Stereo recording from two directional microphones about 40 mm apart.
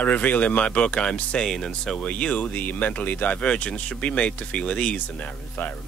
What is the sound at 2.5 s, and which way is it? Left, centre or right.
Speech, left.